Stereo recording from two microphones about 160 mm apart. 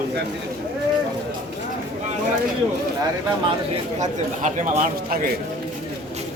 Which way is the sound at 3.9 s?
50° right (ahead or behind).